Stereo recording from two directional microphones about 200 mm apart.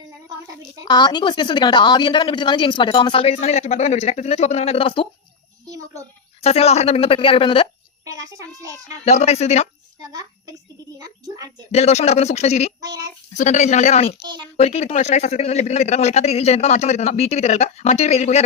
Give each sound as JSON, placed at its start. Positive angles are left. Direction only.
{"t": 0.9, "sound": "a woman's voice", "side_deg": 20}
{"t": 5.6, "sound": "a sound", "side_deg": -20}
{"t": 6.4, "sound": "a woman's voice", "side_deg": 30}
{"t": 8.0, "sound": "a child's voice", "side_deg": -15}
{"t": 9.0, "sound": "speech", "side_deg": 35}
{"t": 10.0, "sound": "a sound", "side_deg": -20}
{"t": 10.9, "sound": "a child's voice", "side_deg": -20}
{"t": 11.7, "sound": "speech", "side_deg": 35}
{"t": 12.8, "sound": "child singing", "side_deg": -15}
{"t": 13.3, "sound": "speech", "side_deg": 35}